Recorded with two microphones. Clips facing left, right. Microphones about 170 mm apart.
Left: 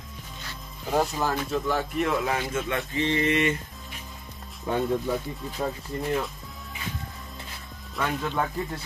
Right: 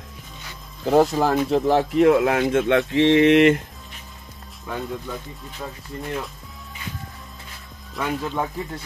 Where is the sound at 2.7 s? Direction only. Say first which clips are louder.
Right 10 dB; 80° right.